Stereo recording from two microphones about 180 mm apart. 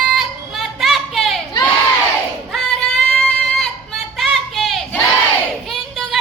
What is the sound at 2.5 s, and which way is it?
Female singing, centre (ahead or behind).